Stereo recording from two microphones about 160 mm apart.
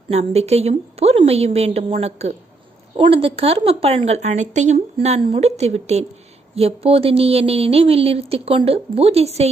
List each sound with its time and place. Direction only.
0.1 s a woman's voice: 40° right (ahead or behind)